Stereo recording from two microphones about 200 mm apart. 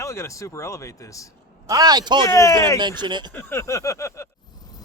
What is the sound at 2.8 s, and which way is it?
Speech, 20° right (ahead or behind).